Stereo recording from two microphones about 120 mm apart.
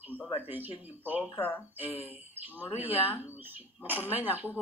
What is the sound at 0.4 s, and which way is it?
Speech, 15° right (ahead or behind).